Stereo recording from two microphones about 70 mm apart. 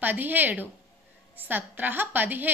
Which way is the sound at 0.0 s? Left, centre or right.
Right.